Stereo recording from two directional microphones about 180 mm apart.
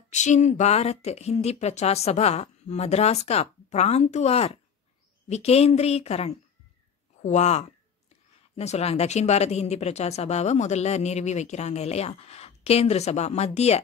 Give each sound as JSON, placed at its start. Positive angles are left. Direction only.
{"t": 0.1, "sound": "speech", "side_deg": 40}